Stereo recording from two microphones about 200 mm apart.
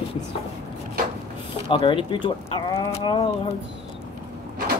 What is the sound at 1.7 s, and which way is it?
Speech, 25° left (ahead or behind).